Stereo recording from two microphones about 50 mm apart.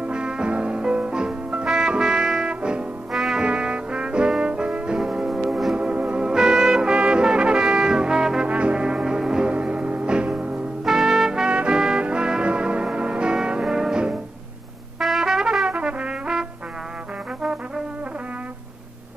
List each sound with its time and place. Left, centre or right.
0.0 s music: centre
1.7 s trombone: centre
3.1 s brass instrument: centre
3.4 s brass instrument: right
5.8 s brass instrument: right
9.5 s music: right
10.9 s trumpet: centre
11.5 s music: centre
15.0 s brass instrument: centre; by 16.3 s right
17.4 s brass instrument: centre